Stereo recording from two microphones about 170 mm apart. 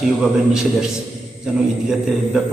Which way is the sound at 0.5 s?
5° right (ahead or behind).